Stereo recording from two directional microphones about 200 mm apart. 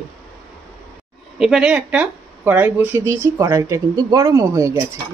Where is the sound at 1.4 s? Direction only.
5° right (ahead or behind).